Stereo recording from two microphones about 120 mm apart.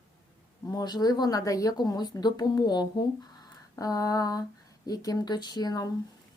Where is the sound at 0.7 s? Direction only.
35° left (ahead or behind).